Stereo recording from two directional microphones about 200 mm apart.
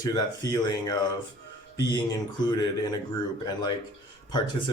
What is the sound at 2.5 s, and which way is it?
Speech, 20° left (ahead or behind).